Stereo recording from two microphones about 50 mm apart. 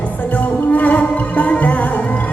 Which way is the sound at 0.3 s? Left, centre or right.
Left.